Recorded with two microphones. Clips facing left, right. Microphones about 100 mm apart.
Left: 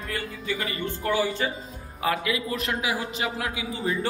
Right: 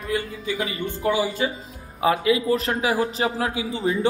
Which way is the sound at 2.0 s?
25° right (ahead or behind).